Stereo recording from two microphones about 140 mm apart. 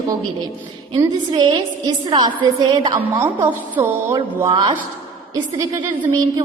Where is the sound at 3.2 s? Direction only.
15° right (ahead or behind).